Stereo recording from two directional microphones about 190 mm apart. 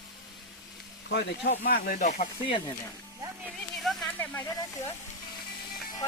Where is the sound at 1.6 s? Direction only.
50° left (ahead or behind); by 2.7 s 25° left (ahead or behind).